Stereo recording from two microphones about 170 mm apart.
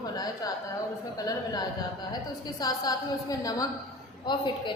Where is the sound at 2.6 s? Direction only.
20° left (ahead or behind).